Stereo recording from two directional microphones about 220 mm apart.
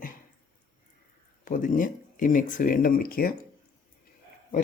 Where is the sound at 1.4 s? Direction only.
35° left (ahead or behind).